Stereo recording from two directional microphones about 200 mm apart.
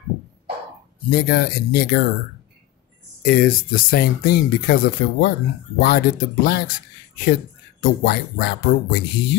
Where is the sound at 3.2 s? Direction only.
50° left (ahead or behind).